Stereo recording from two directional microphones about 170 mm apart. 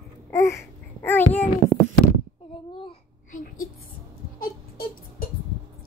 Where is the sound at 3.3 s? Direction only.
55° left (ahead or behind).